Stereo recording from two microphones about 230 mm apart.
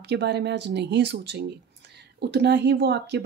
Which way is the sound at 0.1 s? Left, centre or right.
Right.